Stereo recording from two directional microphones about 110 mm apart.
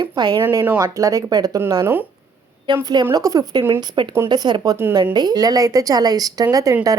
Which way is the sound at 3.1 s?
35° right (ahead or behind).